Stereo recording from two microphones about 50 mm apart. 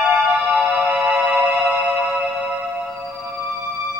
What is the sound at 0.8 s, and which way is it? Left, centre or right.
Music, right.